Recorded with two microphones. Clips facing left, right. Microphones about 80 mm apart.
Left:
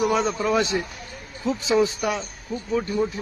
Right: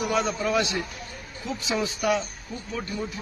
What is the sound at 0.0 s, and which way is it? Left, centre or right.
A man's voice, left.